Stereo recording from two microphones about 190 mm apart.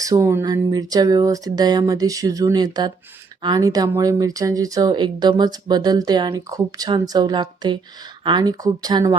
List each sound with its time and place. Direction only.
0.0 s speech: 15° right (ahead or behind)